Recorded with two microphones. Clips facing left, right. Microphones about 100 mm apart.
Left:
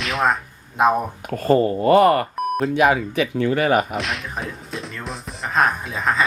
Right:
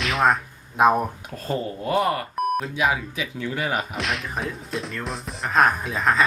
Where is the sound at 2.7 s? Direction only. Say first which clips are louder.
Left 7 dB; 55° left (ahead or behind).